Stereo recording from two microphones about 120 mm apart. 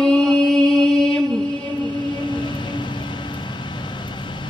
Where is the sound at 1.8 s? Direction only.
40° left (ahead or behind).